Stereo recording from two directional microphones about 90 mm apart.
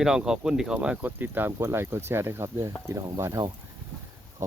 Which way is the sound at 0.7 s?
15° right (ahead or behind).